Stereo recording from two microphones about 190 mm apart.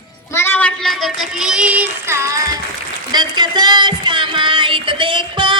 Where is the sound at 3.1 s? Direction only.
20° right (ahead or behind).